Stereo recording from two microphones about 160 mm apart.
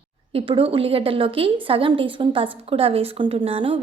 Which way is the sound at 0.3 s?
35° right (ahead or behind).